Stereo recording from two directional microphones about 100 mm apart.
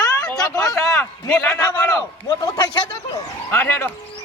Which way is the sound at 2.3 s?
45° left (ahead or behind).